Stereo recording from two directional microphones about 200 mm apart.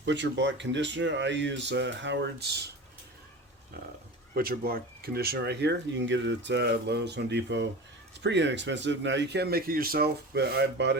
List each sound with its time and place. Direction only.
0.0 s speech: 65° right (ahead or behind)
3.8 s speech: 50° right (ahead or behind)